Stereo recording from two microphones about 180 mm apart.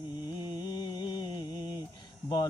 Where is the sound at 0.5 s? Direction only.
25° left (ahead or behind).